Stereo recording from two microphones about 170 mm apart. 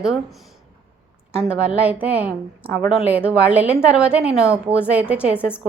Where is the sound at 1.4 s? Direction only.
5° right (ahead or behind).